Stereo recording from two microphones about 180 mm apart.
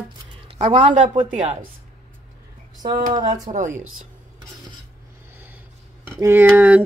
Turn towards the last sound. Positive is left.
turn(degrees=-10)  # may be behind; listen again after turning